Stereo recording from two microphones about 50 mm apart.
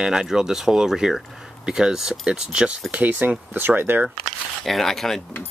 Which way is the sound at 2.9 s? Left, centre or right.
Right.